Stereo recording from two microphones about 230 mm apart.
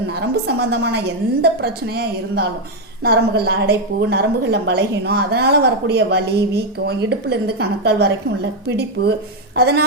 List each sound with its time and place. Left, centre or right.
0.1 s a woman's voice: right